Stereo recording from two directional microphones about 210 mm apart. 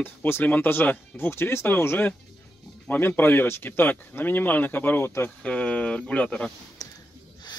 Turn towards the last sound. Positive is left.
turn(degrees=15)  # may be behind; listen again after turning